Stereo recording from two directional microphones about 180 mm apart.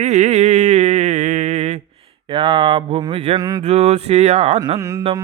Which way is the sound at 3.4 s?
20° right (ahead or behind).